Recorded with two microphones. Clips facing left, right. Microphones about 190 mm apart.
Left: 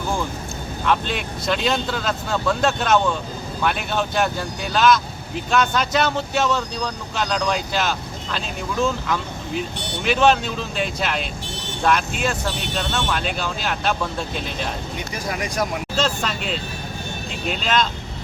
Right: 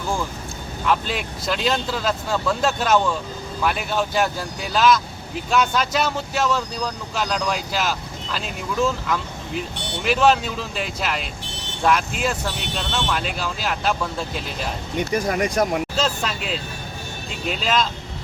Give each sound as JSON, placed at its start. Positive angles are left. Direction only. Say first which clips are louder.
{"t": 0.9, "sound": "speech", "louder": "even", "side_deg": -5}
{"t": 15.3, "sound": "speech", "louder": "right 5 dB", "side_deg": -30}
{"t": 16.0, "sound": "speech", "louder": "left 1 dB", "side_deg": -5}